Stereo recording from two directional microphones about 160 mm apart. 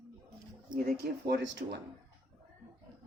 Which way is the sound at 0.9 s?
80° right.